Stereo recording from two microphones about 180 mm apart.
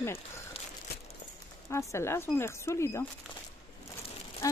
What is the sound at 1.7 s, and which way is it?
Speech, 15° left (ahead or behind).